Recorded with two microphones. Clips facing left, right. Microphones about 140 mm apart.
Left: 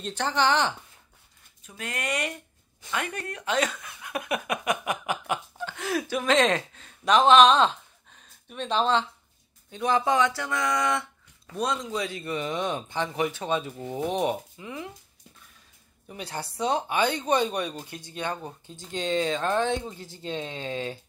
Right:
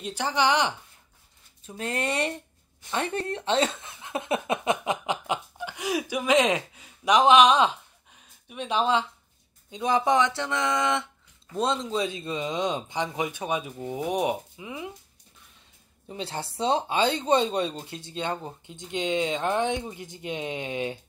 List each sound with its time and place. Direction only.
0.0 s speech: 10° right (ahead or behind)
1.6 s speech: 30° right (ahead or behind); by 14.9 s 15° right (ahead or behind)
16.1 s speech: 25° right (ahead or behind)